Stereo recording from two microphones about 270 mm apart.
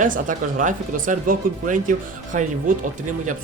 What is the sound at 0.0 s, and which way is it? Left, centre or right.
Speech, right.